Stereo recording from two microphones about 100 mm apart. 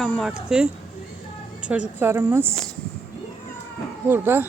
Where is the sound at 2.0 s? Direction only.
25° right (ahead or behind).